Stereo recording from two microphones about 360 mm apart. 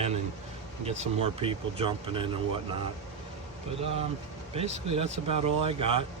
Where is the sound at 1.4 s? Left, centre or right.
Centre.